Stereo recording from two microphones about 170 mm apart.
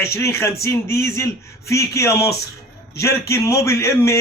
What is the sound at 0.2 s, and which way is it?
A man's voice, 15° left (ahead or behind).